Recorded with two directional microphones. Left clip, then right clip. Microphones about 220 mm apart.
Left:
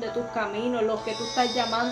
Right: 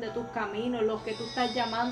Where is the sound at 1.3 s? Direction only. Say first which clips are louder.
Left 5 dB; 35° left (ahead or behind).